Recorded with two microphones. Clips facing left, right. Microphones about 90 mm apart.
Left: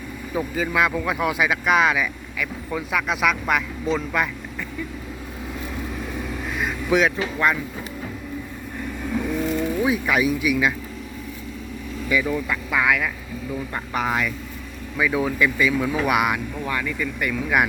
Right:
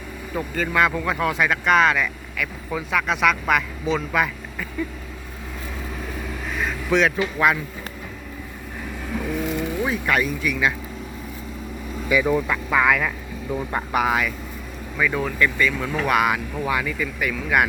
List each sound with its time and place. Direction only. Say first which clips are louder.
0.3 s speech: even; 5° left (ahead or behind)
6.5 s vehicle: even; 5° left (ahead or behind)
7.3 s speech: right 2 dB; 5° right (ahead or behind)
9.1 s vehicle: left 2 dB; 5° right (ahead or behind)
12.1 s speech: right 2 dB; 15° right (ahead or behind)
12.7 s speech: right 2 dB; centre (ahead or behind)
13.5 s speech: right 4 dB; 20° right (ahead or behind)
13.9 s speech: right 2 dB; 5° right (ahead or behind)
16.6 s speech: right 3 dB; 10° right (ahead or behind)
17.0 s speech: left 1 dB; centre (ahead or behind)